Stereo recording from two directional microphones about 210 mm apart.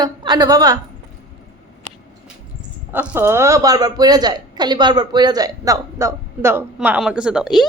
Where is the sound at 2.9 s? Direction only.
10° right (ahead or behind).